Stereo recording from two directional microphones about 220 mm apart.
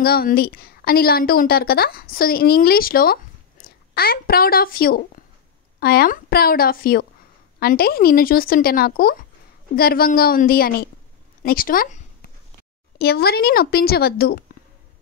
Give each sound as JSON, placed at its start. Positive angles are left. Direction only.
{"t": 0.0, "sound": "a woman's voice", "side_deg": 45}
{"t": 11.4, "sound": "a sound", "side_deg": 40}
{"t": 13.0, "sound": "a woman's voice", "side_deg": 45}